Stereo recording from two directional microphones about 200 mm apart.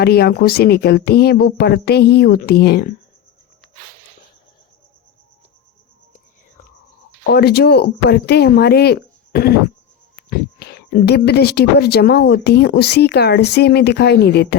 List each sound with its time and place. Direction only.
0.0 s speech: 50° left (ahead or behind)
7.3 s speech: 55° left (ahead or behind)